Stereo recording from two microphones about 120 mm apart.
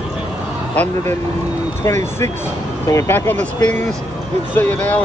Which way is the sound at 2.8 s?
25° left (ahead or behind).